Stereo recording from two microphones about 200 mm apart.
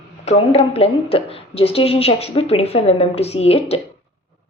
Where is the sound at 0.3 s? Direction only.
30° left (ahead or behind).